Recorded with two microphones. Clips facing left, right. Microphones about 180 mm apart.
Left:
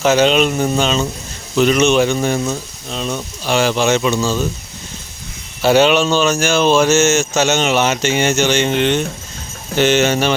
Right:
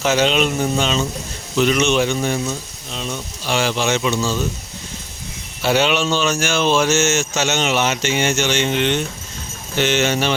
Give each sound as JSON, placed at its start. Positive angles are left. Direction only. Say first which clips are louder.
{"t": 0.0, "sound": "speech", "louder": "left 4 dB", "side_deg": 50}
{"t": 5.6, "sound": "speech", "louder": "left 5 dB", "side_deg": 40}